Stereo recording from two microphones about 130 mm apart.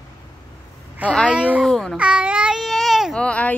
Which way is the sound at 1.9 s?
10° right (ahead or behind).